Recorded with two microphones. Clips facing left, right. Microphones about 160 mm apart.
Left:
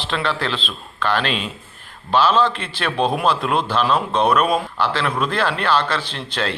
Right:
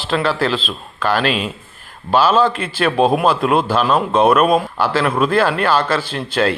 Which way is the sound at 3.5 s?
5° right (ahead or behind).